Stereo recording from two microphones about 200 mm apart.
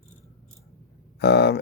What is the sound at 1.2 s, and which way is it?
Speech, 55° left (ahead or behind).